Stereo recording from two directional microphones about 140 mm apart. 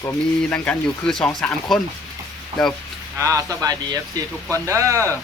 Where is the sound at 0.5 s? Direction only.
10° left (ahead or behind).